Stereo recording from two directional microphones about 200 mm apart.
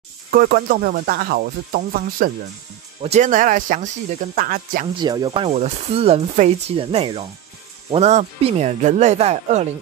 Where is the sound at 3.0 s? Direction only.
35° right (ahead or behind).